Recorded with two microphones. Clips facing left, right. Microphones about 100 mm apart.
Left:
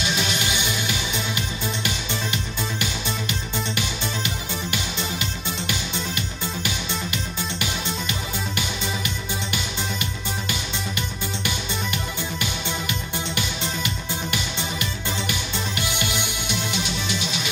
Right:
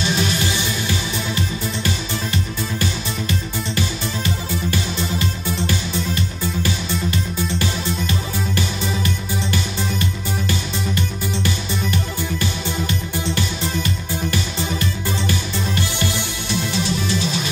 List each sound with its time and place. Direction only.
0.2 s music: 20° left (ahead or behind)
2.3 s music: 20° left (ahead or behind)
5.2 s music: 20° left (ahead or behind)
11.4 s music: 20° left (ahead or behind)
16.7 s music: 35° right (ahead or behind)